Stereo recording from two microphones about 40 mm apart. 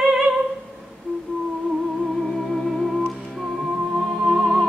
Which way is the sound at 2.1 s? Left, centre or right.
Centre.